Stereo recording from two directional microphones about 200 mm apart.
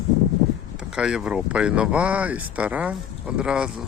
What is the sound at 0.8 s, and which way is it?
Speech, 5° right (ahead or behind).